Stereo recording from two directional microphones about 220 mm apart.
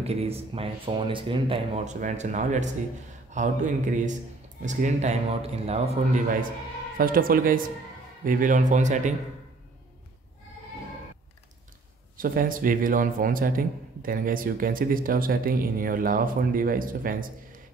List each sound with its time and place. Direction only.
0.0 s a man's voice: 25° right (ahead or behind)
7.0 s a man's voice: 40° right (ahead or behind)
12.2 s a man's voice: 40° right (ahead or behind)